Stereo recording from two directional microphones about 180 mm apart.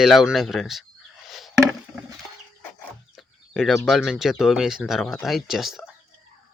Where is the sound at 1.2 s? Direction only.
Centre (ahead or behind).